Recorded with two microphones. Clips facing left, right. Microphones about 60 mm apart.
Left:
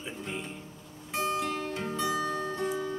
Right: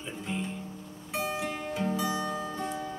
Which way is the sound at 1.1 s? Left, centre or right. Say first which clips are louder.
Left 2 dB; centre.